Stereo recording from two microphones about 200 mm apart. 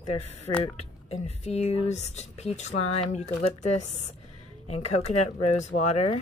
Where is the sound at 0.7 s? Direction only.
30° left (ahead or behind).